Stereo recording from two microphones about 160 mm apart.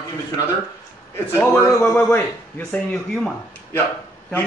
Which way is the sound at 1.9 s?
5° left (ahead or behind).